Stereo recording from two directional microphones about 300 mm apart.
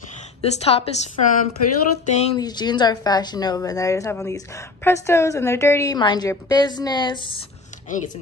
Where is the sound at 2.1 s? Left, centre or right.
Centre.